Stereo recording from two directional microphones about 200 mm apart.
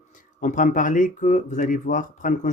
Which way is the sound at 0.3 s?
40° left (ahead or behind).